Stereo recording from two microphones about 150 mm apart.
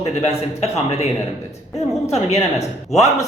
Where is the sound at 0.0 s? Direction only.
45° left (ahead or behind).